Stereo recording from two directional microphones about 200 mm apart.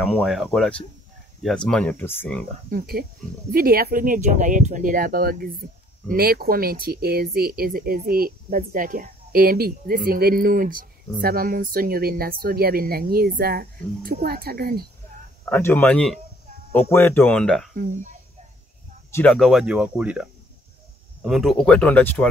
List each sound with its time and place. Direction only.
0.0 s speech: centre (ahead or behind)
2.7 s speech: 50° right (ahead or behind)
15.5 s speech: 10° left (ahead or behind)
17.7 s speech: 40° right (ahead or behind)
19.1 s speech: 5° left (ahead or behind)